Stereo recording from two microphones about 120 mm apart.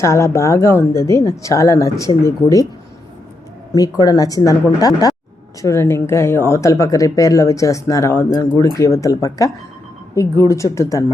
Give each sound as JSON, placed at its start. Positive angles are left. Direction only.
{"t": 0.0, "sound": "speech", "side_deg": 25}
{"t": 3.8, "sound": "speech", "side_deg": 30}
{"t": 5.6, "sound": "speech", "side_deg": 20}